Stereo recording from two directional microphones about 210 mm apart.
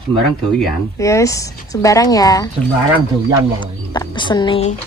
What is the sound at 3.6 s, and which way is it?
Speech, 20° left (ahead or behind).